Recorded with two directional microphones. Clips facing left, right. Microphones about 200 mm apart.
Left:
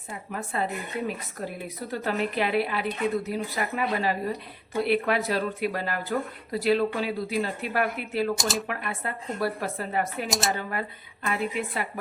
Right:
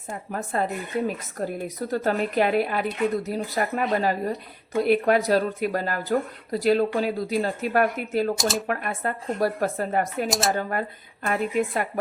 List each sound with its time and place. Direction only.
0.1 s speech: 45° right (ahead or behind)
8.4 s speech: centre (ahead or behind)
8.6 s speech: 45° right (ahead or behind)
10.2 s speech: centre (ahead or behind)
10.6 s speech: 45° right (ahead or behind)